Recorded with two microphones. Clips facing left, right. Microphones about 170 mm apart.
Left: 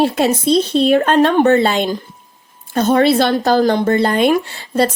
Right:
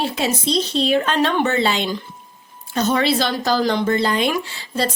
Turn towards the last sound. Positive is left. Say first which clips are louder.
# left 7 dB
turn(degrees=55)  # may be behind; listen again after turning